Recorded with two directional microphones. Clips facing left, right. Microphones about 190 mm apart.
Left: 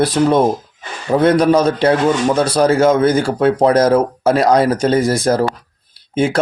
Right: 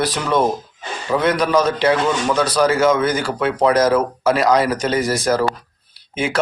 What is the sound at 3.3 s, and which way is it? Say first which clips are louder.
Speech: left 4 dB; 35° left (ahead or behind).